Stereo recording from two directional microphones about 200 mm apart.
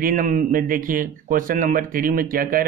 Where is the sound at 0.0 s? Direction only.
45° right (ahead or behind).